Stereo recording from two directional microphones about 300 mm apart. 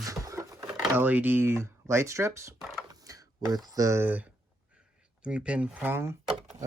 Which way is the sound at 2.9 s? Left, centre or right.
Centre.